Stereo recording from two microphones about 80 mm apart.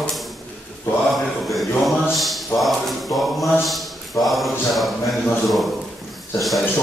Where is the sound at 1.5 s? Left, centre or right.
Centre.